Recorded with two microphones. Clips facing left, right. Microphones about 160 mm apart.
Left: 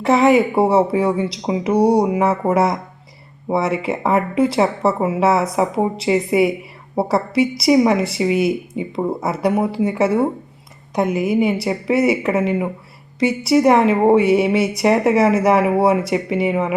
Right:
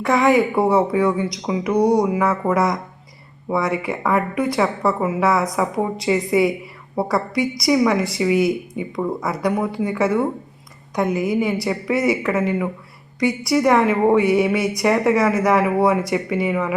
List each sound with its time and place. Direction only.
0.0 s a woman's voice: 25° left (ahead or behind)